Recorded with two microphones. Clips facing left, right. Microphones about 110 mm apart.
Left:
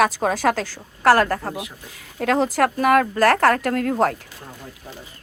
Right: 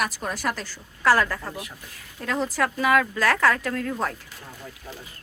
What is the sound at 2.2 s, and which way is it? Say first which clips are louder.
Speech: left 7 dB; 85° left.